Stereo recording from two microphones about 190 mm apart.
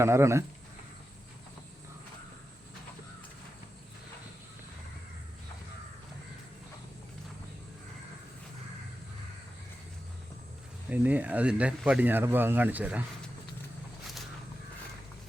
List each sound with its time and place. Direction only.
0.0 s speech: 15° right (ahead or behind)
10.8 s speech: 10° right (ahead or behind)